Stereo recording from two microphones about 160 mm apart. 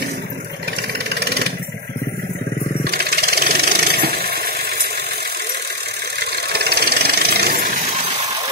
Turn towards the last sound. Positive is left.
turn(degrees=-65)  # may be behind; listen again after turning